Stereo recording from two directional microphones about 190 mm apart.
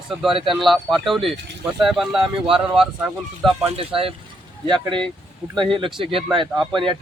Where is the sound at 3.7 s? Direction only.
30° right (ahead or behind).